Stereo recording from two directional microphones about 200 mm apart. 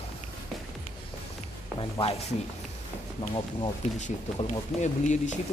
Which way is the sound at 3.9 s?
35° left (ahead or behind).